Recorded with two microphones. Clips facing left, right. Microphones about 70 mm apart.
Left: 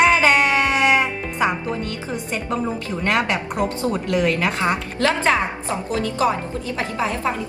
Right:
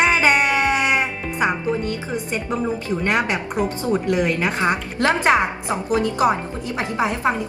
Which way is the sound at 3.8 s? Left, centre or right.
Right.